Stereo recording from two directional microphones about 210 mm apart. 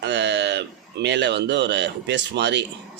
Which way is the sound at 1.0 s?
55° right (ahead or behind).